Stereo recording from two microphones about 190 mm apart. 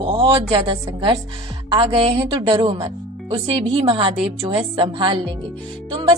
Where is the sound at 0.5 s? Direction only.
25° right (ahead or behind).